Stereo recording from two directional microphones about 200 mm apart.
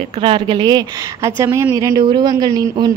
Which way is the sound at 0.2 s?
25° right (ahead or behind).